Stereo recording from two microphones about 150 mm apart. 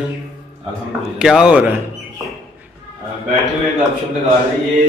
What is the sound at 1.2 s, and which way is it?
Speech, 5° right (ahead or behind).